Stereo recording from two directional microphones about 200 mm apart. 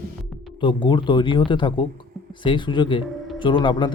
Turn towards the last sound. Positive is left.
turn(degrees=20)  # may be behind; listen again after turning